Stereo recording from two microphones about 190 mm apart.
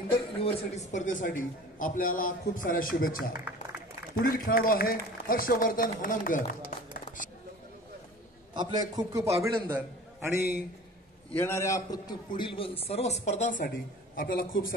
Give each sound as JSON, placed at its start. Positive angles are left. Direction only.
{"t": 0.1, "sound": "a man's voice", "side_deg": 30}
{"t": 8.5, "sound": "a man's voice", "side_deg": -20}
{"t": 11.3, "sound": "a man's voice", "side_deg": 15}